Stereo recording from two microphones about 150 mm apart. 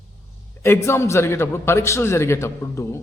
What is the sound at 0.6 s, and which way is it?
A man's voice, 15° left (ahead or behind).